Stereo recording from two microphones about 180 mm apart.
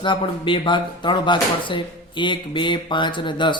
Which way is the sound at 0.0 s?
25° left (ahead or behind).